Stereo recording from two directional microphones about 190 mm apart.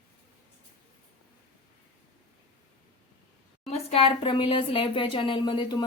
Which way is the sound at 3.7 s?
30° left (ahead or behind).